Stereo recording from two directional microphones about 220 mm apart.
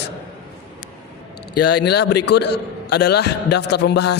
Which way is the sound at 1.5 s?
50° left (ahead or behind).